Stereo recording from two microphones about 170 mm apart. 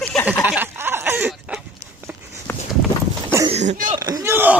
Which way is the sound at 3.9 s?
20° right (ahead or behind).